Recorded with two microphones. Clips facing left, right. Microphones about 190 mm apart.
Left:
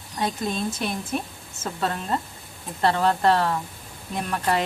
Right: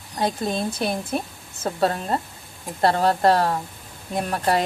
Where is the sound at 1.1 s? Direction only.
40° right (ahead or behind).